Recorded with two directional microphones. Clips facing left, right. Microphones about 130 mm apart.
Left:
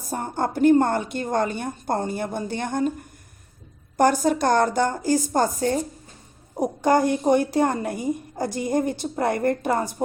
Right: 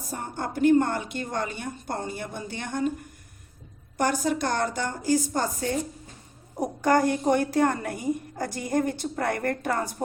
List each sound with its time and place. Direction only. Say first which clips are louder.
0.1 s a woman's voice: left 6 dB; 40° left (ahead or behind)
3.9 s a woman's voice: left 6 dB; 40° left (ahead or behind)
6.6 s a woman's voice: left 3 dB; 15° left (ahead or behind)